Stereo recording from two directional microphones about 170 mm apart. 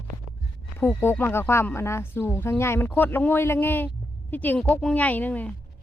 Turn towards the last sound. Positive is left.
turn(degrees=10)  # may be behind; listen again after turning